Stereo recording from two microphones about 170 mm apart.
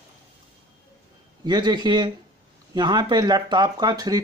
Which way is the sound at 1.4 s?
25° right (ahead or behind).